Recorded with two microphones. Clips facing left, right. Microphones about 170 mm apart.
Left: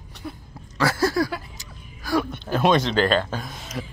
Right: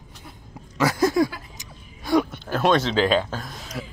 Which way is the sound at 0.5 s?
20° right (ahead or behind).